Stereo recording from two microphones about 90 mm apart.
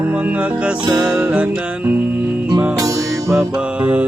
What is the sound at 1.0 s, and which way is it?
Mantra, 15° right (ahead or behind).